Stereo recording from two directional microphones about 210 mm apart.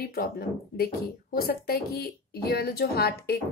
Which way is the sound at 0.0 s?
45° left (ahead or behind).